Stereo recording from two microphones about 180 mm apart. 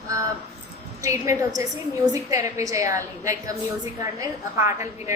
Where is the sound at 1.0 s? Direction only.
15° right (ahead or behind).